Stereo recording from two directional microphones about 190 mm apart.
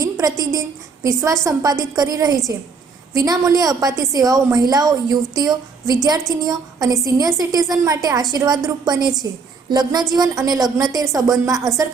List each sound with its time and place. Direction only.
0.0 s a woman's voice: 20° right (ahead or behind)